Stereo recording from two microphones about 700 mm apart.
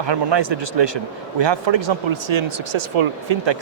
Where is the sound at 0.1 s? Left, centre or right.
Right.